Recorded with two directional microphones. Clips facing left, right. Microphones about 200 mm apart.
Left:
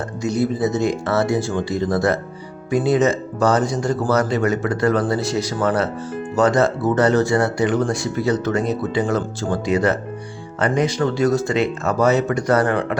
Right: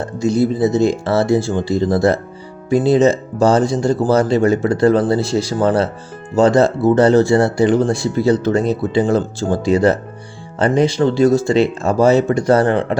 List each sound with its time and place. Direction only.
0.2 s speech: 30° right (ahead or behind)